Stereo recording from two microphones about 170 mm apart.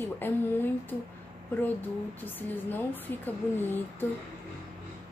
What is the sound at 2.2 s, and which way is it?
A woman's voice, 10° left (ahead or behind).